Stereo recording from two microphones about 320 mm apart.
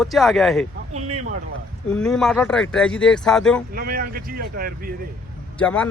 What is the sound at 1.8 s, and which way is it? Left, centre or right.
Speech, centre.